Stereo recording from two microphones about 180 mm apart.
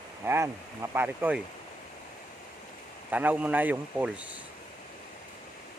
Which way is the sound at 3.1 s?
10° right (ahead or behind).